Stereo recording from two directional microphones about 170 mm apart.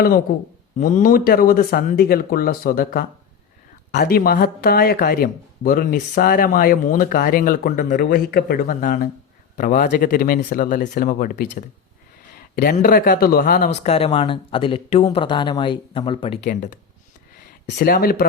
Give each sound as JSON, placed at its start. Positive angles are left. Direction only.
{"t": 0.8, "sound": "speech", "side_deg": 50}
{"t": 12.7, "sound": "speech", "side_deg": 55}
{"t": 13.7, "sound": "speech", "side_deg": 40}
{"t": 16.5, "sound": "speech", "side_deg": 45}
{"t": 17.7, "sound": "speech", "side_deg": 65}